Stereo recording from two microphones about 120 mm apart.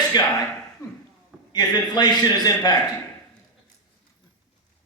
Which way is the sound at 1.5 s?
35° left (ahead or behind).